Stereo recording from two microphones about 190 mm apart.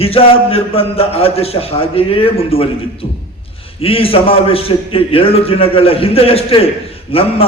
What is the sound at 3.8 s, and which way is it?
A man's voice, 30° left (ahead or behind).